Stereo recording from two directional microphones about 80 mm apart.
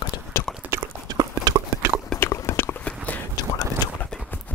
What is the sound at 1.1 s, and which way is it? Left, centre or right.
Horse, right.